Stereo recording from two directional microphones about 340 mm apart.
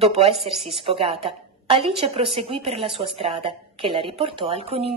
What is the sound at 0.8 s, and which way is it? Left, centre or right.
A woman's voice, centre.